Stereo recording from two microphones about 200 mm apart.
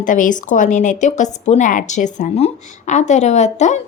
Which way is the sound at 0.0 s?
40° left (ahead or behind).